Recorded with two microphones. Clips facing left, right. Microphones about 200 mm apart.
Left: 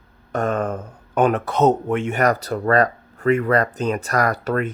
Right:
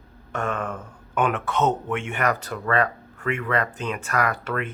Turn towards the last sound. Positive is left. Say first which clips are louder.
# left 5 dB
turn(degrees=40)  # may be behind; listen again after turning